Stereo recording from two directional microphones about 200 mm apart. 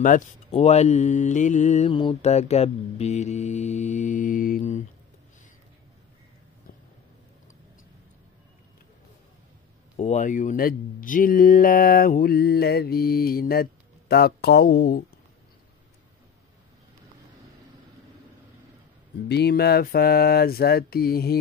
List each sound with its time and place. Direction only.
0.0 s speech: 35° left (ahead or behind)
9.9 s speech: 40° left (ahead or behind)
19.2 s speech: 55° left (ahead or behind)